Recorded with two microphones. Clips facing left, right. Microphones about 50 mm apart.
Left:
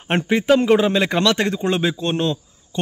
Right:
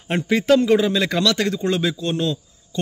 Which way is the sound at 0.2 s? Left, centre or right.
Left.